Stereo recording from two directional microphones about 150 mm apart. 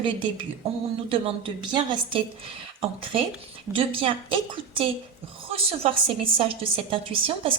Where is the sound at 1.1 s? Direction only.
35° right (ahead or behind).